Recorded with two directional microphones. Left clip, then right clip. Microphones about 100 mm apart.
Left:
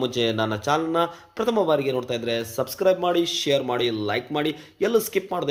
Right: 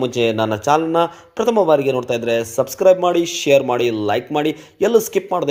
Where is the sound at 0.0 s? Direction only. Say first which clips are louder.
Right 6 dB; 30° right (ahead or behind).